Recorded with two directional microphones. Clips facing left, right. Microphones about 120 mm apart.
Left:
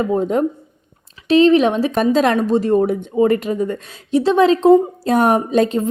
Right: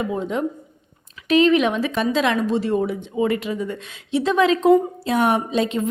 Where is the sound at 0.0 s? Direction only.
40° left (ahead or behind).